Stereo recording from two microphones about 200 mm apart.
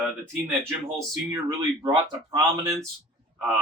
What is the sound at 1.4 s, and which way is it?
Speech, 20° right (ahead or behind).